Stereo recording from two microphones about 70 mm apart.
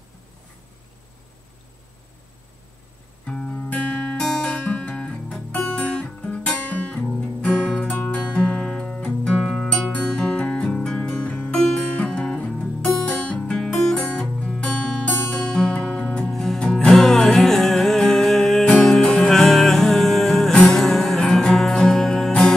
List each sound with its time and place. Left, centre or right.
3.3 s music: centre
3.5 s music: left
4.2 s music: centre
4.6 s guitar: left
8.0 s music: centre
9.9 s music: centre
11.5 s music: centre